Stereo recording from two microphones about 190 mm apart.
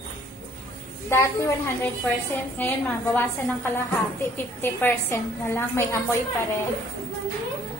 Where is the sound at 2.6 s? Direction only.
10° left (ahead or behind).